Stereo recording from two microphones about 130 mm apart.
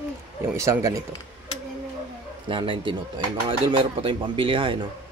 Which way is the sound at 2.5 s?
40° right (ahead or behind).